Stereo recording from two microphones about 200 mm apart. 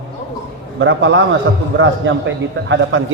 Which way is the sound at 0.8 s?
70° right (ahead or behind).